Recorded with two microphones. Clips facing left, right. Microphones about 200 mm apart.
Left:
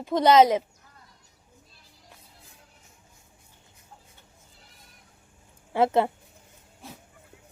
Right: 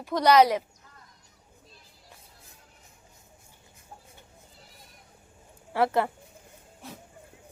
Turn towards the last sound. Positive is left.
turn(degrees=25)  # may be behind; listen again after turning